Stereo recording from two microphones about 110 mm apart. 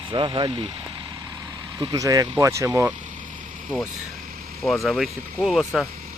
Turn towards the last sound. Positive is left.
turn(degrees=0)  # may be behind; listen again after turning